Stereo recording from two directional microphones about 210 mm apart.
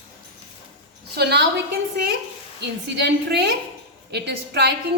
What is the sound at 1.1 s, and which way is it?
Speech, 50° right (ahead or behind).